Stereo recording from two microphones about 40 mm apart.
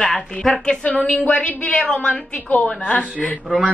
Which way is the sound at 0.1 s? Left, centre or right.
Centre.